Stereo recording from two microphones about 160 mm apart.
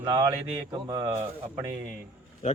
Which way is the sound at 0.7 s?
25° right (ahead or behind).